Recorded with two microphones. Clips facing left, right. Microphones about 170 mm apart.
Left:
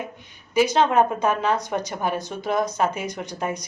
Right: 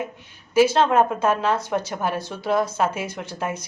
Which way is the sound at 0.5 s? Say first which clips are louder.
Right 2 dB; 5° right (ahead or behind).